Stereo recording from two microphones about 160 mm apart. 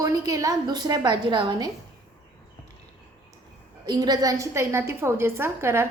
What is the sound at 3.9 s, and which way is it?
A woman's voice, 25° right (ahead or behind).